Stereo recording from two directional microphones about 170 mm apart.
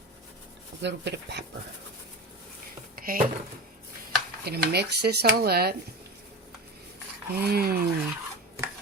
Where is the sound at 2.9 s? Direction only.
55° right (ahead or behind).